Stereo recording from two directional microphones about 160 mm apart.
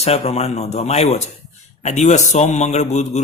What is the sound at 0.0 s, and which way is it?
A man's voice, 40° left (ahead or behind).